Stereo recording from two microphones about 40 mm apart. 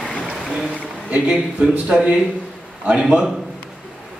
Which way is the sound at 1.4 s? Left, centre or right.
Centre.